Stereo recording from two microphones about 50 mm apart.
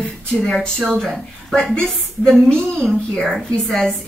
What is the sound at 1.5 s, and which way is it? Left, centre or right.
A woman's voice, centre.